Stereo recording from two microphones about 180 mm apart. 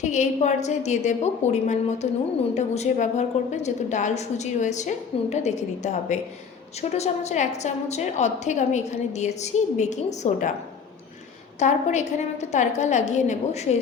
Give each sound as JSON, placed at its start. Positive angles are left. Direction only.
{"t": 0.0, "sound": "a woman's voice", "side_deg": 40}
{"t": 11.6, "sound": "a woman's voice", "side_deg": 40}